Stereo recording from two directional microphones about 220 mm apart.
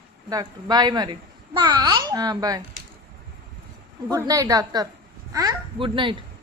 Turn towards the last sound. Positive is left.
turn(degrees=-20)  # may be behind; listen again after turning